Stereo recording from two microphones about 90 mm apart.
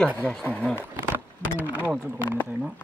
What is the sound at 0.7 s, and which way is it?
Speech, 25° right (ahead or behind).